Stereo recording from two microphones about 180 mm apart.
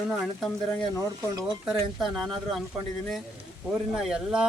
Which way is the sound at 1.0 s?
20° right (ahead or behind).